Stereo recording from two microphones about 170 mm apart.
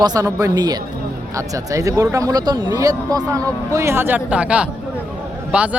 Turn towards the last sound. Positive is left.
turn(degrees=-5)  # may be behind; listen again after turning